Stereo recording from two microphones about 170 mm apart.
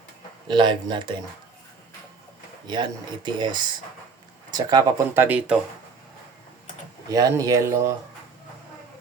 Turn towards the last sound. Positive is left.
turn(degrees=-20)  # may be behind; listen again after turning